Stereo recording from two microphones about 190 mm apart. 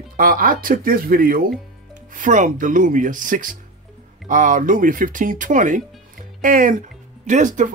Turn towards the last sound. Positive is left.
turn(degrees=-40)  # may be behind; listen again after turning